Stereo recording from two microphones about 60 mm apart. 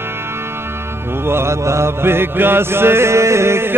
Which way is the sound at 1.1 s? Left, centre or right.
Right.